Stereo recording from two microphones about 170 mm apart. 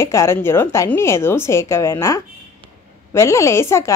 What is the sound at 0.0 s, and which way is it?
A woman's voice, 15° left (ahead or behind).